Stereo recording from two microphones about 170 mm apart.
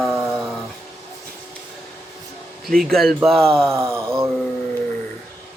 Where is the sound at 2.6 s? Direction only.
Centre (ahead or behind).